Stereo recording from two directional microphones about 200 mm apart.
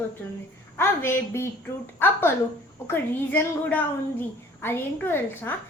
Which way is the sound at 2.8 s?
10° left (ahead or behind).